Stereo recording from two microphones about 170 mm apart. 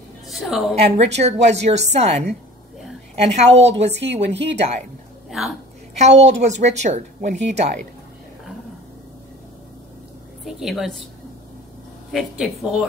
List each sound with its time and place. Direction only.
0.3 s a woman's voice: centre (ahead or behind)
1.1 s a woman's voice: 40° right (ahead or behind)
3.3 s a woman's voice: 40° right (ahead or behind)
3.6 s speech: 90° right
4.6 s a woman's voice: 40° right (ahead or behind)
5.3 s a woman's voice: centre (ahead or behind)
5.9 s a woman's voice: 40° right (ahead or behind)
10.4 s a woman's voice: centre (ahead or behind)
12.1 s a woman's voice: centre (ahead or behind)